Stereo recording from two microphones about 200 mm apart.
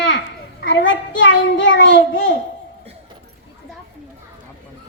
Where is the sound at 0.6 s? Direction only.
60° left (ahead or behind).